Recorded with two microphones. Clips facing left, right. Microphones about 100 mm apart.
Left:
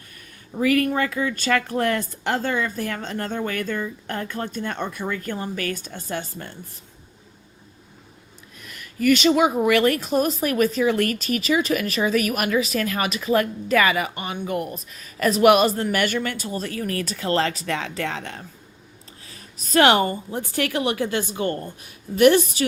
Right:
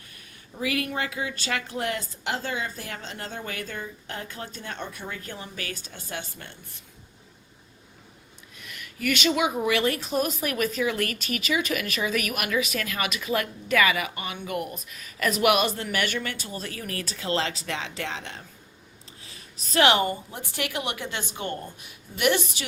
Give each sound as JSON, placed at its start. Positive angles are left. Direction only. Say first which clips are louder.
{"t": 0.6, "sound": "speech", "louder": "left 8 dB", "side_deg": 45}
{"t": 8.5, "sound": "a sound", "louder": "left 8 dB", "side_deg": 40}
{"t": 9.6, "sound": "speech", "louder": "left 6 dB", "side_deg": 55}